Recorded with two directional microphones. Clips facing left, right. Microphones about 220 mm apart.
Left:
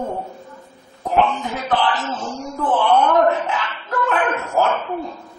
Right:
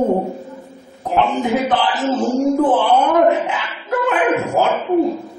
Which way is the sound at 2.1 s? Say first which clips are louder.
Right 11 dB; 45° right (ahead or behind).